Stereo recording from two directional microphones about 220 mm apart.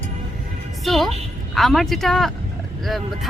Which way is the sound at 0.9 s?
Centre (ahead or behind).